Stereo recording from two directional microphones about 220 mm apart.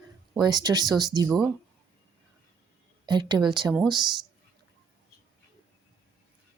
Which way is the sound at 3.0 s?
20° right (ahead or behind).